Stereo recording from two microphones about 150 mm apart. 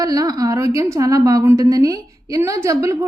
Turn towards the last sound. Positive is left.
turn(degrees=-20)  # may be behind; listen again after turning